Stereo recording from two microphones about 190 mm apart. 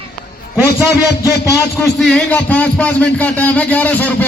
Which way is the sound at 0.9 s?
15° left (ahead or behind).